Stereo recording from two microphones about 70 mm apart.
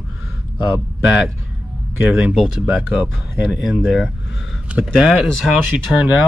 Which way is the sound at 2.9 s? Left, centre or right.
Centre.